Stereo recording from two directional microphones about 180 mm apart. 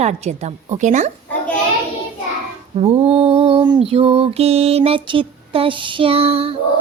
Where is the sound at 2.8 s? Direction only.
35° right (ahead or behind).